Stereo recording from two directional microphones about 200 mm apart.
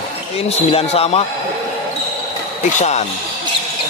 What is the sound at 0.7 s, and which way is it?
Speech, 30° left (ahead or behind).